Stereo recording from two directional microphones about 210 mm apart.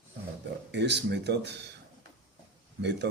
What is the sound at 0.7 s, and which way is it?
Speech, 55° right (ahead or behind).